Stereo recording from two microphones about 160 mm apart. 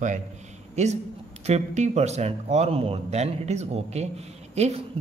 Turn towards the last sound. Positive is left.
turn(degrees=-45)  # may be behind; listen again after turning